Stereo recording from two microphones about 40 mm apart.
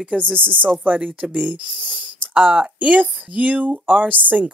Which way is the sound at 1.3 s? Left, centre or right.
Right.